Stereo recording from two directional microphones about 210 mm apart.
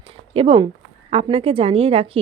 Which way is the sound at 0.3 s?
25° right (ahead or behind).